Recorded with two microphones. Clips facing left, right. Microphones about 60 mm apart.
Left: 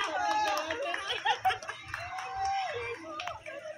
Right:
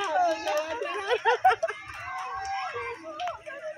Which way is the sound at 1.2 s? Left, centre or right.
Right.